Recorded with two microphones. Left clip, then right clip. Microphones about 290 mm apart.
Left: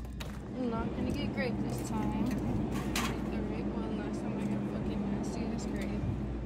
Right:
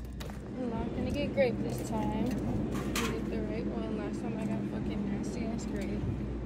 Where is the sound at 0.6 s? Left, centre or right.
Left.